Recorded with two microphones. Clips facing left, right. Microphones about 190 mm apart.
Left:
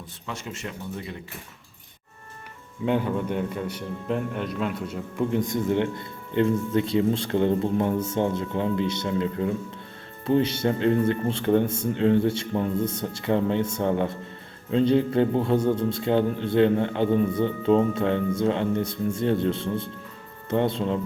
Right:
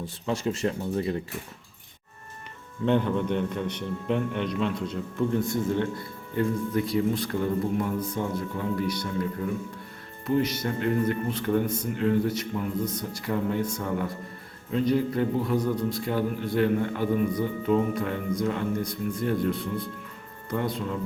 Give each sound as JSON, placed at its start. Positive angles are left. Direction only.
{"t": 0.3, "sound": "speech", "side_deg": -35}
{"t": 2.8, "sound": "a man's voice", "side_deg": 5}